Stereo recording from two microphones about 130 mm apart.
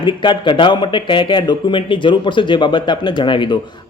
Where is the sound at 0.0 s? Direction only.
35° left (ahead or behind).